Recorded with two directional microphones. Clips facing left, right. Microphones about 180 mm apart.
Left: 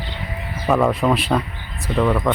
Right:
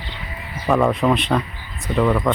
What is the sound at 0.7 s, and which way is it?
Speech, centre (ahead or behind).